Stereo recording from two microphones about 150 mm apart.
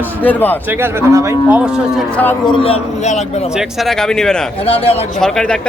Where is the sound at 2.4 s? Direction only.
35° left (ahead or behind).